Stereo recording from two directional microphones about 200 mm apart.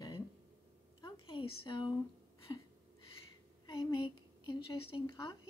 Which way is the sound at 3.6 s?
20° left (ahead or behind).